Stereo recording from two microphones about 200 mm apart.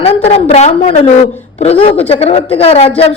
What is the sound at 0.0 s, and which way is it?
A woman's voice, 35° left (ahead or behind).